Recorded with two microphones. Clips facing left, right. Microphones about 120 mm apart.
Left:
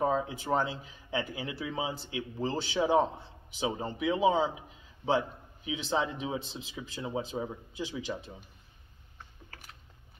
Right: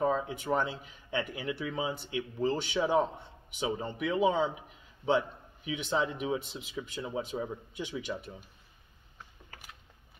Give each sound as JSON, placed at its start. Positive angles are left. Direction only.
{"t": 0.0, "sound": "a man's voice", "side_deg": 30}
{"t": 5.7, "sound": "speech", "side_deg": 30}